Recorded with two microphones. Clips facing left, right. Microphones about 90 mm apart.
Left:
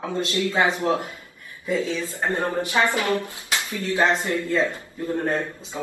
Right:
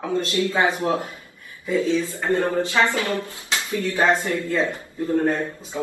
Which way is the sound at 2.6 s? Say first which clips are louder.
Right 1 dB; 20° left (ahead or behind).